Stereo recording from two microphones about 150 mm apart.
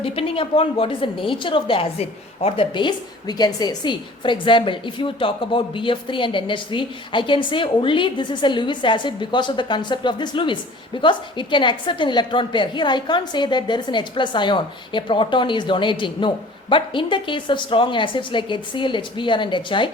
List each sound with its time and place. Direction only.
0.0 s a woman's voice: 40° left (ahead or behind)